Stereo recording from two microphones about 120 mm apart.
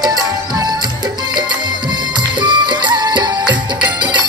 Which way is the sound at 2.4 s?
40° right (ahead or behind).